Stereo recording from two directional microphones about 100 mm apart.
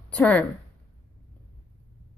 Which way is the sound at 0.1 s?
15° left (ahead or behind).